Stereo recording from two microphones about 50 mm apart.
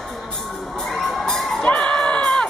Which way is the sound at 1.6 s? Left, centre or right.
Left.